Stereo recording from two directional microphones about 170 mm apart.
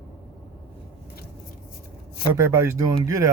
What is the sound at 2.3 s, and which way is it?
Speech, 15° right (ahead or behind).